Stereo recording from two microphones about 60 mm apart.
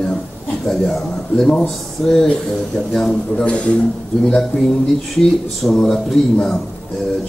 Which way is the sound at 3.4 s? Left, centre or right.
Centre.